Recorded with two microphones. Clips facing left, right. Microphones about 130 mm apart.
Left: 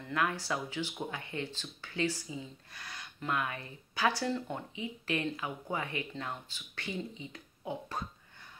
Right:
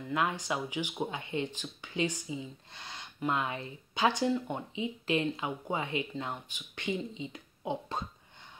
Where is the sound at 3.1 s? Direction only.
25° right (ahead or behind).